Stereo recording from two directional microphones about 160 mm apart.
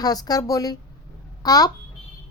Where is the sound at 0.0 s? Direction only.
25° left (ahead or behind).